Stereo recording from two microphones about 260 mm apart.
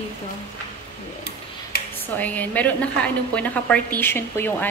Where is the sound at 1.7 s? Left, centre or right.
Left.